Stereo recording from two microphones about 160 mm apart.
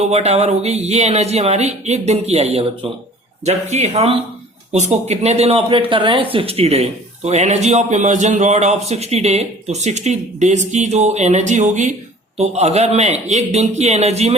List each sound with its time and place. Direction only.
0.0 s a man's voice: 40° right (ahead or behind)